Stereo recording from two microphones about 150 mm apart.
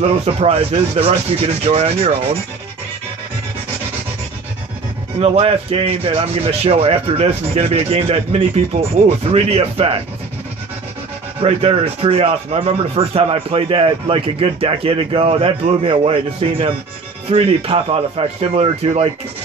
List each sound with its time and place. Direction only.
0.0 s speech: 45° right (ahead or behind)
5.2 s speech: 40° right (ahead or behind)
11.4 s speech: 40° right (ahead or behind)